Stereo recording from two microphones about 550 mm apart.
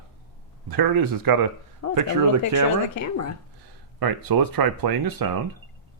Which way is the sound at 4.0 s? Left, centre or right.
Right.